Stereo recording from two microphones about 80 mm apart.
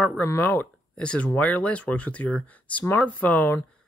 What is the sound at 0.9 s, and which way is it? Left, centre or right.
Speech, centre.